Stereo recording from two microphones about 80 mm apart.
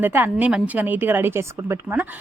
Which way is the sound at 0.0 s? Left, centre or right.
Right.